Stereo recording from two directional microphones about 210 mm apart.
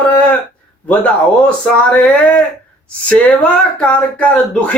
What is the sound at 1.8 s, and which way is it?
Speech, 5° left (ahead or behind).